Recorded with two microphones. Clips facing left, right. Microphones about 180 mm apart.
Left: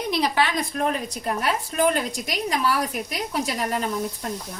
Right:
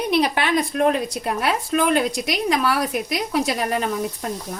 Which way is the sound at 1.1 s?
75° right (ahead or behind).